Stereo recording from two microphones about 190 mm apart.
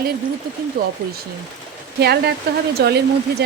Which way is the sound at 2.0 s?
60° right (ahead or behind).